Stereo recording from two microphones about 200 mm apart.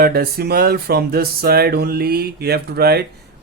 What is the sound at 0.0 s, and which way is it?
Speech, 50° right (ahead or behind).